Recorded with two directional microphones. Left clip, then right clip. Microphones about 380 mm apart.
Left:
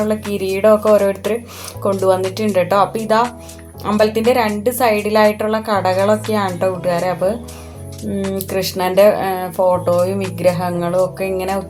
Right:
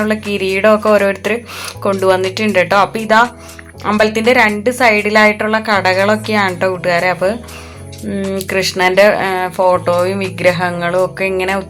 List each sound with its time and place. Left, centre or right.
0.0 s a woman's voice: left